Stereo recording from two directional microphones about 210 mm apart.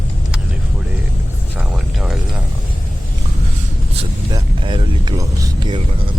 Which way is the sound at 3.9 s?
25° right (ahead or behind).